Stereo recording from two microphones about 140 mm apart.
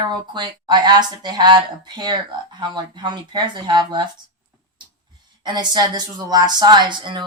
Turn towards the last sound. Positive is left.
turn(degrees=-35)  # may be behind; listen again after turning